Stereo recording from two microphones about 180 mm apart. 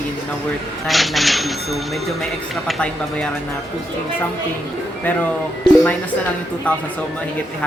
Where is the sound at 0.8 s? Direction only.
Centre (ahead or behind).